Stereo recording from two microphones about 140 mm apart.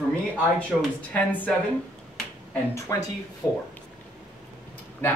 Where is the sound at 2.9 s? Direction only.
25° left (ahead or behind).